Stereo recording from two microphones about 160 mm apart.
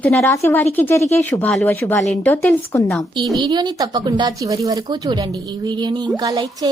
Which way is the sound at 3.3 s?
25° right (ahead or behind).